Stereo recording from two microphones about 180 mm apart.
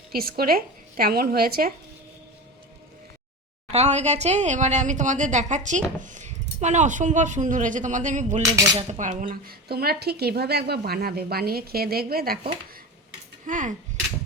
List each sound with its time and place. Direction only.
0.1 s a woman's voice: 55° right (ahead or behind)
3.7 s speech: 35° right (ahead or behind)
8.4 s cutlery: 20° right (ahead or behind)
8.9 s a woman's voice: 45° right (ahead or behind)
13.5 s speech: 45° right (ahead or behind)